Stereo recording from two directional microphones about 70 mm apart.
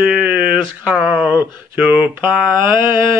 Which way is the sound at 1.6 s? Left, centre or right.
Right.